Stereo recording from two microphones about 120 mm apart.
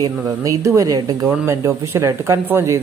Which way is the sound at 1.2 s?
15° right (ahead or behind).